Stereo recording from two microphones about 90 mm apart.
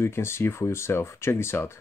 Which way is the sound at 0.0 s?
30° left (ahead or behind).